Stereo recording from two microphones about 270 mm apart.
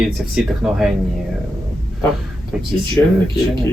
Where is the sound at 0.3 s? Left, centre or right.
Centre.